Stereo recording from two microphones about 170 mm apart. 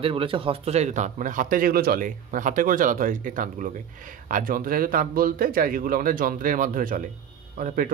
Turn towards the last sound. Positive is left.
turn(degrees=-50)  # may be behind; listen again after turning